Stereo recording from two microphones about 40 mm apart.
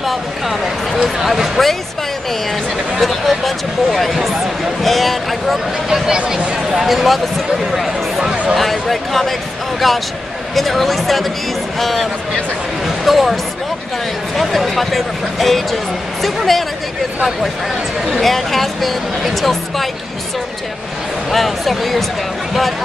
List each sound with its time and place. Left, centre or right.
0.0 s a sound: centre
1.0 s speech: centre
3.0 s speech: centre
5.9 s speech: centre
6.9 s speech: centre
8.3 s a sound: right
8.5 s speech: centre
18.0 s speech: centre
21.3 s speech: centre